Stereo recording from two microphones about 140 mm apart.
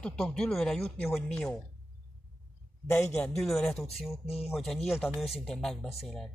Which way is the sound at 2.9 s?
15° left (ahead or behind).